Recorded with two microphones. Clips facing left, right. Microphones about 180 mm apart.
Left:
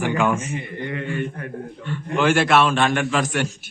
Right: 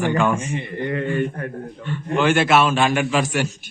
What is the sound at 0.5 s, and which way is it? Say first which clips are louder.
Mantra: right 4 dB; 35° right (ahead or behind).